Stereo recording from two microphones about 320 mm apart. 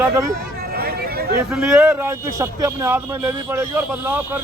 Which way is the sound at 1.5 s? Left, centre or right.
Centre.